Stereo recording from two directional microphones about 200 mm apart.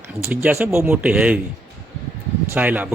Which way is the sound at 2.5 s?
10° right (ahead or behind).